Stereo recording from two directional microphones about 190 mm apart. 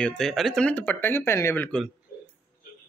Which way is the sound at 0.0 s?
Centre (ahead or behind).